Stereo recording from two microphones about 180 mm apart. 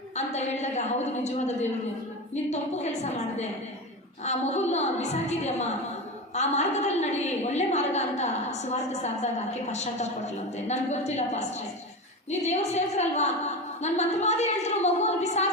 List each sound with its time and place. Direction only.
0.2 s a woman's voice: 40° left (ahead or behind)